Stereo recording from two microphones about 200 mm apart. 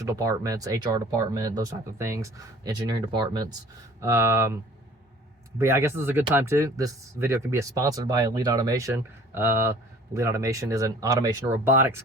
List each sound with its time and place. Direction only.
0.1 s speech: 15° right (ahead or behind)
5.5 s speech: 15° right (ahead or behind)